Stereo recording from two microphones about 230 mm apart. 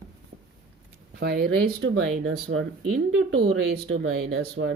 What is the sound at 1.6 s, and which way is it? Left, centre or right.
Speech, right.